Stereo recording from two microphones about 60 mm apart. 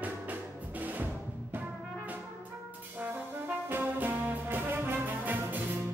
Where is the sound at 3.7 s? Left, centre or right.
Right.